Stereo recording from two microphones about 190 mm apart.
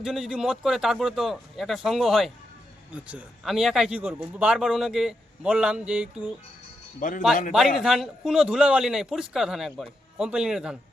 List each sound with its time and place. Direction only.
0.0 s speech: centre (ahead or behind)
7.0 s speech: 45° left (ahead or behind)
7.8 s speech: centre (ahead or behind)